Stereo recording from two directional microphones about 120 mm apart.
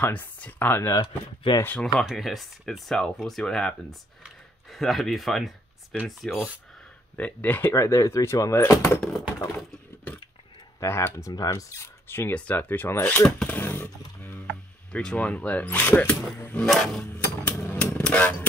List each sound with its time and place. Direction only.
0.0 s speech: 15° left (ahead or behind)
0.9 s speech: 35° left (ahead or behind)
1.6 s speech: 15° left (ahead or behind)
2.0 s speech: centre (ahead or behind)
4.7 s speech: centre (ahead or behind)
7.2 s speech: 10° left (ahead or behind)
10.8 s speech: 20° left (ahead or behind)
13.4 s chainsaw: 15° left (ahead or behind)
14.9 s speech: 5° left (ahead or behind)
16.6 s speech: centre (ahead or behind)
17.5 s chainsaw: 15° left (ahead or behind)
18.0 s motorcycle: 10° left (ahead or behind)